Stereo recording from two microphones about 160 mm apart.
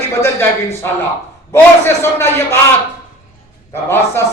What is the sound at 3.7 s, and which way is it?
Speech, 15° left (ahead or behind).